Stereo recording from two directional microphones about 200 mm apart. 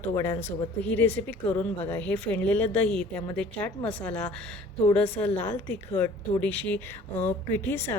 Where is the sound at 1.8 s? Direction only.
10° left (ahead or behind).